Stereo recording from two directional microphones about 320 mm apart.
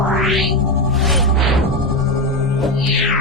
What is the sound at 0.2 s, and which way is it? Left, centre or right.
Music, centre.